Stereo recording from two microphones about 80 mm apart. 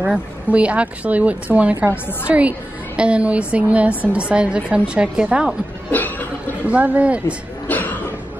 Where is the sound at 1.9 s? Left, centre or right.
Left.